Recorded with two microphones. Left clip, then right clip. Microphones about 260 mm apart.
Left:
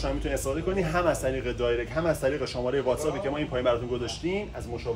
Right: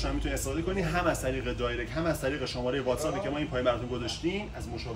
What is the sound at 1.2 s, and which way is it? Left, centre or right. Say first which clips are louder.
Speech: left 3 dB; centre.